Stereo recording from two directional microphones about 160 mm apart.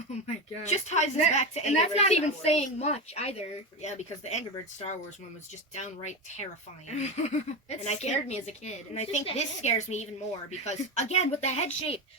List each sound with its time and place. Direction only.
0.6 s a woman's voice: 45° left (ahead or behind)
5.7 s a woman's voice: 45° left (ahead or behind)